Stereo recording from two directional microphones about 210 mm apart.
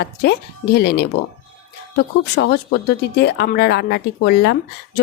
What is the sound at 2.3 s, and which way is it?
Speech, 50° left (ahead or behind).